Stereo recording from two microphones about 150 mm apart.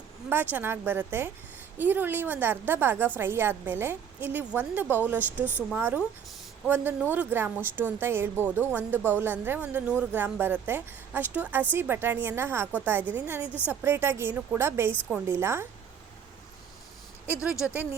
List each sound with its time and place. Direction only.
0.3 s a woman's voice: 15° right (ahead or behind)
17.3 s speech: 5° right (ahead or behind)